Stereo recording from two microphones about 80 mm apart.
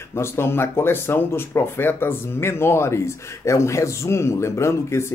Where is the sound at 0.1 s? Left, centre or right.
Left.